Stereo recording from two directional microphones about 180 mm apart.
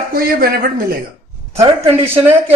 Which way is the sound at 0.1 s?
55° right (ahead or behind).